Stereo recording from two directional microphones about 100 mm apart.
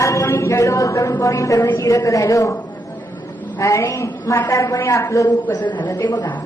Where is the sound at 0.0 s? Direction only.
30° left (ahead or behind).